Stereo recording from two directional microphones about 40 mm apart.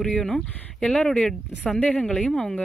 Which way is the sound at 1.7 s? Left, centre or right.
Left.